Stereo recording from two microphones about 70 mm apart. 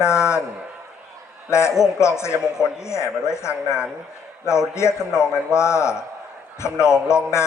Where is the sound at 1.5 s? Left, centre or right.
Left.